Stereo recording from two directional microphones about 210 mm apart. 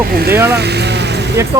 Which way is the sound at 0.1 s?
45° right (ahead or behind).